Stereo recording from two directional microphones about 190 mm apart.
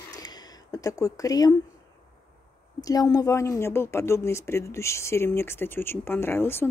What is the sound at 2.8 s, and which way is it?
Speech, 20° left (ahead or behind).